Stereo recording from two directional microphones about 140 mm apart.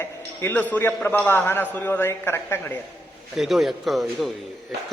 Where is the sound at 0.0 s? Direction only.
15° left (ahead or behind).